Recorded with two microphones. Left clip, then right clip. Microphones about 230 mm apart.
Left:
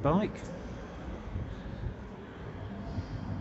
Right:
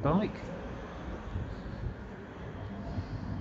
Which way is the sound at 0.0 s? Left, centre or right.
Centre.